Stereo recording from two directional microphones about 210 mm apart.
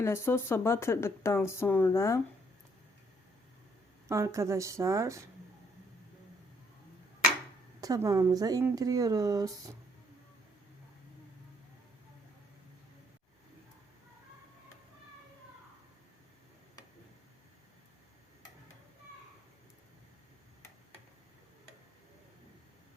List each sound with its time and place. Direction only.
0.0 s speech: 10° left (ahead or behind)
4.1 s speech: 15° right (ahead or behind)
7.8 s speech: 15° right (ahead or behind)